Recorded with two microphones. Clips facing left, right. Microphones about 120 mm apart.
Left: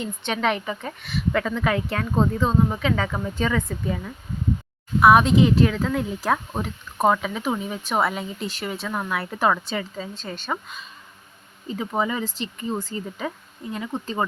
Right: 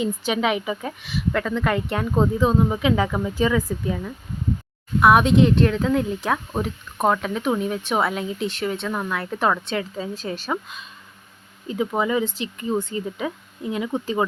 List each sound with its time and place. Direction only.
0.0 s speech: 5° right (ahead or behind)